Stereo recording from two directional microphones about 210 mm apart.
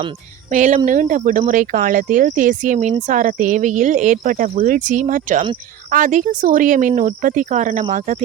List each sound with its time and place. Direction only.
0.5 s speech: 35° right (ahead or behind)